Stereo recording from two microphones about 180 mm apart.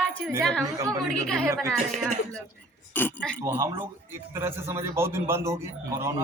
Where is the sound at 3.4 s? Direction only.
15° right (ahead or behind).